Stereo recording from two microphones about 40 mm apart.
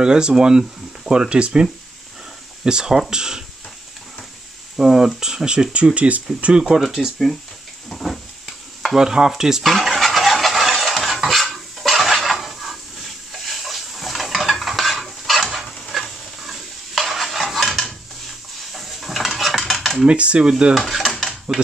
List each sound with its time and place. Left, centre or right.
0.0 s speech: centre
4.7 s speech: centre; by 6.2 s right
6.6 s speech: centre
7.9 s stir: centre
8.9 s speech: centre
9.7 s vehicle: centre
15.8 s stir: centre
20.1 s speech: right
20.9 s dishes: centre